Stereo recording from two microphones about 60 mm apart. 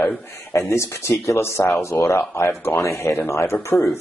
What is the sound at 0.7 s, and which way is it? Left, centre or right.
Speech, left.